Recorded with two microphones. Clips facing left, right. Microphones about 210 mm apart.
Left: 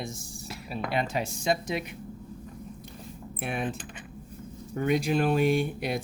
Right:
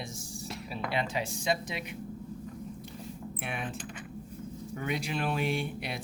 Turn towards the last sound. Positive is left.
turn(degrees=45)  # may be behind; listen again after turning